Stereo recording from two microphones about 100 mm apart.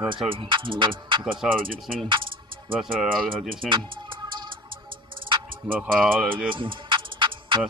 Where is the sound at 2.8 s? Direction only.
5° right (ahead or behind).